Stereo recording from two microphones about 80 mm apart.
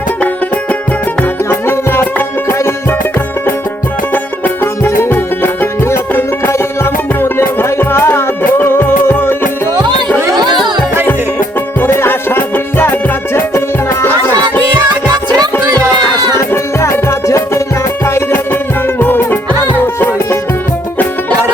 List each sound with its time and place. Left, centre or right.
1.5 s music: left
4.1 s music: left
11.8 s music: left
16.4 s music: left